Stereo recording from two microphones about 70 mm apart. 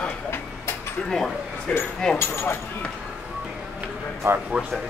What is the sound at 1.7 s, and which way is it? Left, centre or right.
Speech, centre.